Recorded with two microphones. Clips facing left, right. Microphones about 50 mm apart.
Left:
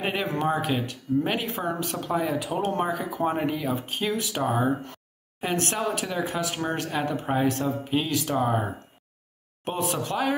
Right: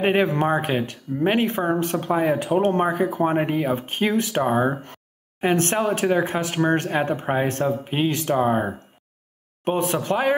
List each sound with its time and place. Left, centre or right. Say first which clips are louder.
0.0 s speech: right 7 dB; right
9.7 s speech: right 6 dB; right